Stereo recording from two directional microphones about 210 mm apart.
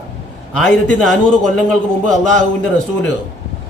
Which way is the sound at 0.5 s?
5° left (ahead or behind).